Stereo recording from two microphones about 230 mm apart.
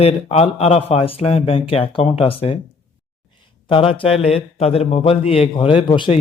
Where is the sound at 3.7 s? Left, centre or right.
Left.